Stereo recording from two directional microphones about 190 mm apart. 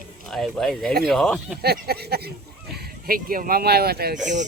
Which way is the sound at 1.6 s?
55° right (ahead or behind).